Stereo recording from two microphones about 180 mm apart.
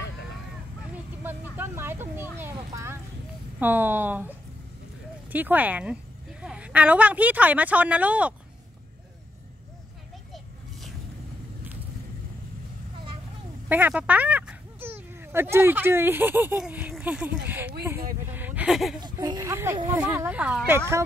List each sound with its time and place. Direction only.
1.2 s vehicle: 10° right (ahead or behind)
2.3 s speech: 15° right (ahead or behind)
5.3 s speech: 10° right (ahead or behind)
13.7 s speech: 10° right (ahead or behind)
18.9 s speech: 25° right (ahead or behind)